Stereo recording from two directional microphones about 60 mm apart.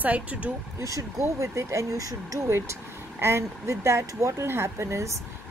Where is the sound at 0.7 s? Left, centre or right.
Right.